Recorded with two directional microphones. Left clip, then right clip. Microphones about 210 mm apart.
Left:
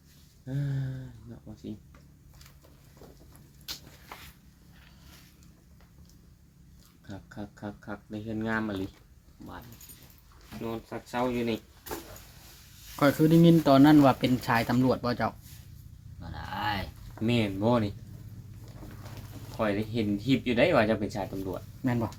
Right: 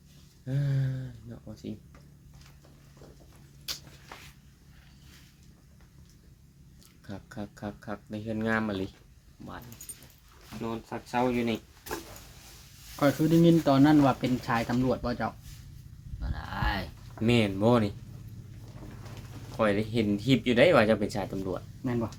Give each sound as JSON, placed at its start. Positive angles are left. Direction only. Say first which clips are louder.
{"t": 0.4, "sound": "a sound", "louder": "right 2 dB", "side_deg": -30}
{"t": 1.6, "sound": "speech", "louder": "right 1 dB", "side_deg": -30}
{"t": 3.7, "sound": "a sound", "louder": "right 3 dB", "side_deg": -25}
{"t": 7.1, "sound": "speech", "louder": "right 2 dB", "side_deg": -30}
{"t": 10.6, "sound": "speech", "louder": "even", "side_deg": -15}
{"t": 13.0, "sound": "speech", "louder": "left 2 dB", "side_deg": 40}
{"t": 16.2, "sound": "a sound", "louder": "left 1 dB", "side_deg": -5}
{"t": 17.2, "sound": "speech", "louder": "right 2 dB", "side_deg": -30}
{"t": 19.5, "sound": "speech", "louder": "right 3 dB", "side_deg": -35}